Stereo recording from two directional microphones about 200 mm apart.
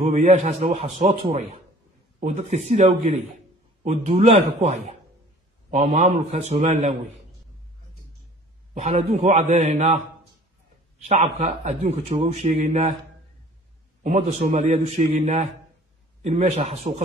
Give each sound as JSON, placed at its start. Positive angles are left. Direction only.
{"t": 0.0, "sound": "a man's voice", "side_deg": -35}
{"t": 8.7, "sound": "a man's voice", "side_deg": -30}
{"t": 14.0, "sound": "a man's voice", "side_deg": -35}